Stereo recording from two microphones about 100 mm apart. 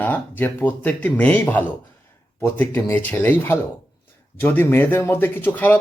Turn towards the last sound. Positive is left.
turn(degrees=20)  # may be behind; listen again after turning